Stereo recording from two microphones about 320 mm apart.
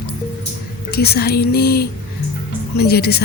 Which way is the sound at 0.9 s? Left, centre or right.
Left.